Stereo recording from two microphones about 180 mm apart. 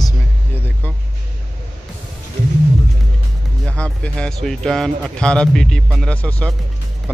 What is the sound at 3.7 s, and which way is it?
A man's voice, 5° left (ahead or behind).